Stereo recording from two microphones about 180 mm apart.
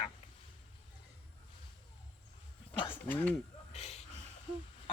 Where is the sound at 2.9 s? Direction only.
10° left (ahead or behind).